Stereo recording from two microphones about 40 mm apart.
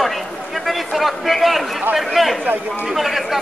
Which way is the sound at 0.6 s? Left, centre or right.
Centre.